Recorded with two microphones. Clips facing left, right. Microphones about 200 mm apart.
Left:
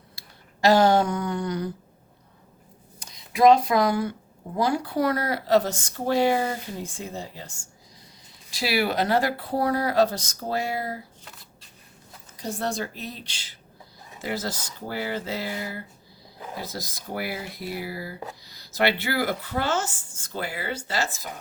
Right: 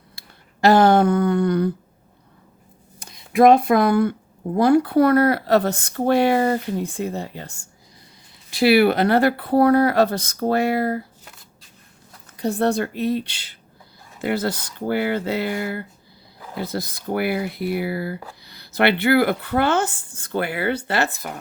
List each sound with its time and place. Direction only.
0.2 s a sound: 60° right (ahead or behind)
3.0 s speech: 55° right (ahead or behind)
12.4 s speech: 60° right (ahead or behind)